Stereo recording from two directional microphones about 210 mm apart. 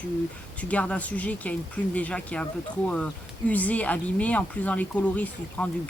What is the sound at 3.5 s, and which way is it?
Speech, 5° left (ahead or behind).